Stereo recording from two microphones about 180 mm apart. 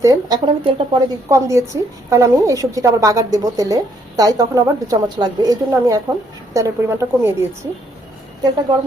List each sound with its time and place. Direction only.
0.0 s a woman's voice: 20° right (ahead or behind)
1.3 s a woman's voice: 15° right (ahead or behind)